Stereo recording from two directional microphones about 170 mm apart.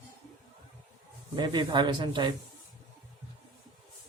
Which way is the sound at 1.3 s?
25° right (ahead or behind).